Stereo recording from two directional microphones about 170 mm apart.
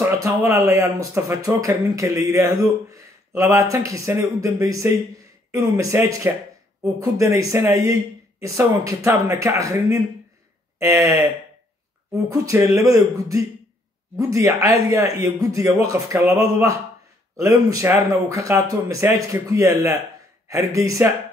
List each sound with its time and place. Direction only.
0.2 s speech: 20° right (ahead or behind)